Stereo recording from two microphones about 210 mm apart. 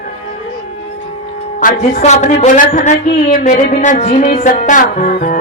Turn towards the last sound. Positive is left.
turn(degrees=40)  # may be behind; listen again after turning